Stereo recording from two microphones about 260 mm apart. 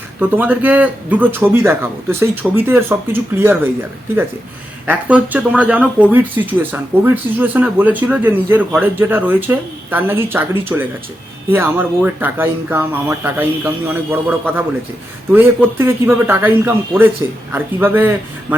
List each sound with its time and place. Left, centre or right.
0.2 s speech: centre
4.9 s speech: centre